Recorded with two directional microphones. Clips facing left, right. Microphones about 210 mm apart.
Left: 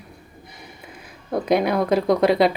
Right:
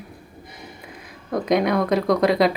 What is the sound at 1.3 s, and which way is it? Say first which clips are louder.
Speech: even; 30° left (ahead or behind).